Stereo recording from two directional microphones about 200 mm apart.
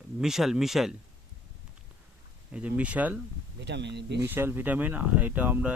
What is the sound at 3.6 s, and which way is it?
Speech, 60° right (ahead or behind).